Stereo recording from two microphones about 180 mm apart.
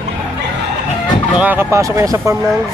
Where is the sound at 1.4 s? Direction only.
10° right (ahead or behind).